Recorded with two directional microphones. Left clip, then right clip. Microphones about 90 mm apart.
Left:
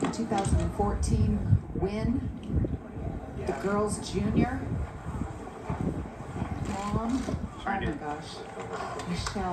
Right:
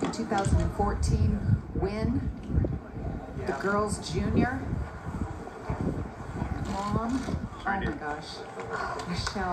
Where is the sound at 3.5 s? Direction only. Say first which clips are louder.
Right 1 dB; centre (ahead or behind).